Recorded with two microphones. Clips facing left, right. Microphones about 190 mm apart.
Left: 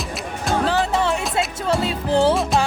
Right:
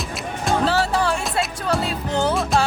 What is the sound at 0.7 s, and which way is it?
Music, 20° left (ahead or behind).